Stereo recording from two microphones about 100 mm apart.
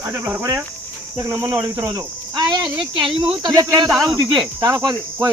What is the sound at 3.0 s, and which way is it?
Speech, 60° right (ahead or behind).